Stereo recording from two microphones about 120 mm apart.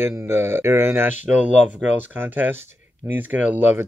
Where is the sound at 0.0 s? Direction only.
20° right (ahead or behind).